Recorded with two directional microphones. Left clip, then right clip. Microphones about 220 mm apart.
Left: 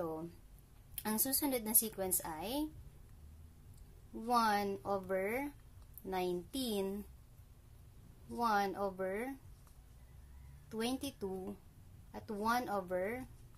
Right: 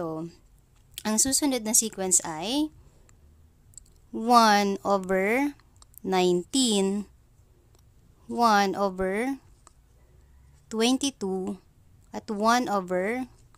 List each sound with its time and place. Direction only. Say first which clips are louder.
0.0 s a sound: right 8 dB; 45° right (ahead or behind)
0.9 s a woman's voice: right 13 dB; 45° right (ahead or behind)
4.1 s a woman's voice: right 14 dB; 50° right (ahead or behind)
8.3 s a woman's voice: right 13 dB; 50° right (ahead or behind)
10.7 s a woman's voice: right 15 dB; 50° right (ahead or behind)